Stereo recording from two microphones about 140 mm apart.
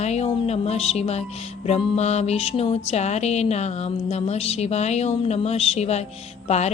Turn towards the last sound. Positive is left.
turn(degrees=50)  # may be behind; listen again after turning